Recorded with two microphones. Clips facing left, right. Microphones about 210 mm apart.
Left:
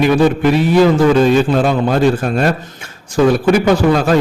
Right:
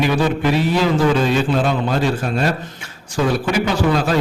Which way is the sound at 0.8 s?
45° left (ahead or behind).